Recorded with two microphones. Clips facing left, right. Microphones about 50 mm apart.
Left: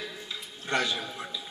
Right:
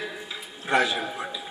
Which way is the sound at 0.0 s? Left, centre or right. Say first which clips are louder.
Right 4 dB; centre.